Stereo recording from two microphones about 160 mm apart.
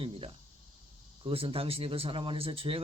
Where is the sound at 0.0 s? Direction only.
35° right (ahead or behind).